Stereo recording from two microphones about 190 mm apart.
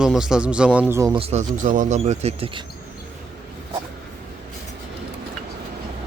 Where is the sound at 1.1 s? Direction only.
35° right (ahead or behind).